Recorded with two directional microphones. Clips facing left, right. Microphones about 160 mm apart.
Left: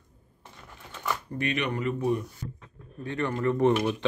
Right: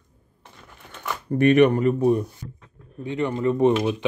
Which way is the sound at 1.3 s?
50° right (ahead or behind).